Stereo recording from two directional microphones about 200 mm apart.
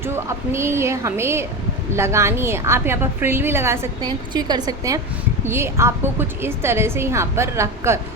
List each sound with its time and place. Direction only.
0.0 s a woman's voice: 10° right (ahead or behind)